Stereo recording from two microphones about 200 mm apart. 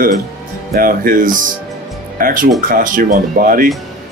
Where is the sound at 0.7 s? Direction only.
45° right (ahead or behind).